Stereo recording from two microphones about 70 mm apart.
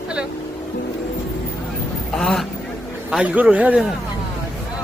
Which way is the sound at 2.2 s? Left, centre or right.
Centre.